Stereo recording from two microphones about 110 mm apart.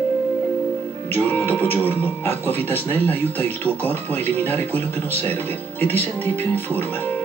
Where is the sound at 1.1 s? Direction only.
15° left (ahead or behind).